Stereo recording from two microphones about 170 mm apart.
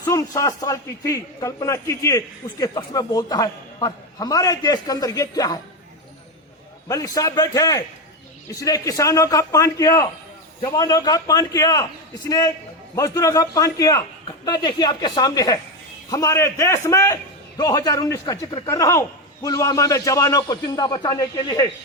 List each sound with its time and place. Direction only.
0.0 s a man's voice: 20° left (ahead or behind)
6.8 s a man's voice: 20° left (ahead or behind)